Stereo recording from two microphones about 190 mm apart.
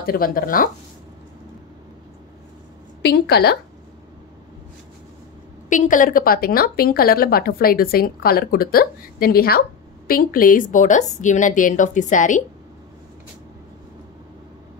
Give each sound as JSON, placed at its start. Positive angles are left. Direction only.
{"t": 0.0, "sound": "a woman's voice", "side_deg": 50}
{"t": 3.0, "sound": "a woman's voice", "side_deg": 60}
{"t": 5.7, "sound": "a woman's voice", "side_deg": 40}